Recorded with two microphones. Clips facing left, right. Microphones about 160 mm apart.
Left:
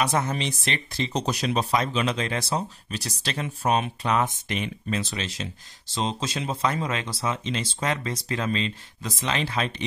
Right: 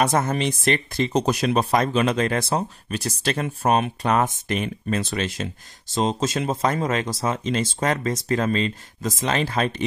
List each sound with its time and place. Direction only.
0.0 s speech: 50° right (ahead or behind)